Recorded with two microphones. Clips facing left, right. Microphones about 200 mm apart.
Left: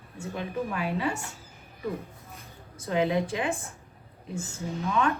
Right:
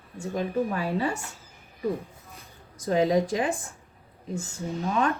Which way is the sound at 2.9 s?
35° right (ahead or behind).